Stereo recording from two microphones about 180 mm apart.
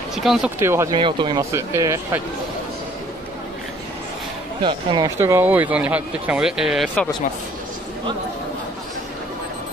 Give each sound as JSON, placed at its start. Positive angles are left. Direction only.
{"t": 0.1, "sound": "speech", "side_deg": 0}
{"t": 0.6, "sound": "speech", "side_deg": -15}
{"t": 0.9, "sound": "speech", "side_deg": -25}
{"t": 1.5, "sound": "speech", "side_deg": -15}
{"t": 4.6, "sound": "speech", "side_deg": -25}
{"t": 5.1, "sound": "speech", "side_deg": -15}